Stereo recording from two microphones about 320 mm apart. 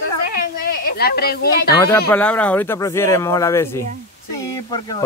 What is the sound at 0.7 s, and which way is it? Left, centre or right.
Speech, left.